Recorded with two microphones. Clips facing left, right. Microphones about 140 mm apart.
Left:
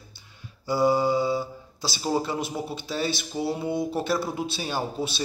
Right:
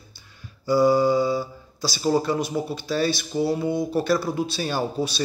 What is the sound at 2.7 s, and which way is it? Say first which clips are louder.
A man's voice: right 5 dB; 20° left (ahead or behind).